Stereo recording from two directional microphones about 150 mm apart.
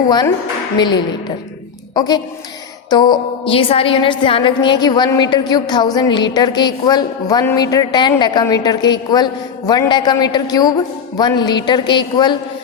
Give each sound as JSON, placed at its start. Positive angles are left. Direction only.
{"t": 0.8, "sound": "a woman's voice", "side_deg": 30}